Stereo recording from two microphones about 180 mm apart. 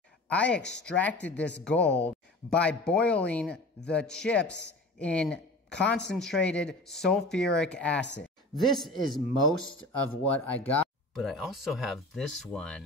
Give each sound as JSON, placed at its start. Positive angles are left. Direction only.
{"t": 0.3, "sound": "speech", "side_deg": 5}
{"t": 10.2, "sound": "speech", "side_deg": 10}